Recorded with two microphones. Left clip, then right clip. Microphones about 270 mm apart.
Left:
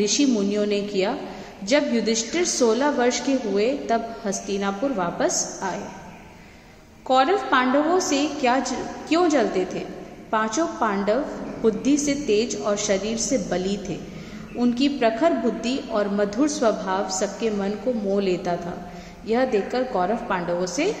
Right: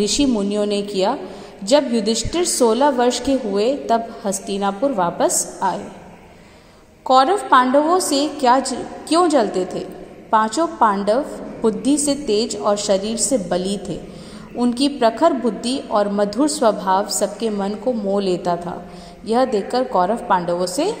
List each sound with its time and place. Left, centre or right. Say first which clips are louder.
0.0 s a woman's voice: right 3 dB; right
7.1 s a woman's voice: right 5 dB; right
10.6 s a woman's voice: right 7 dB; centre
15.0 s a woman's voice: right 6 dB; right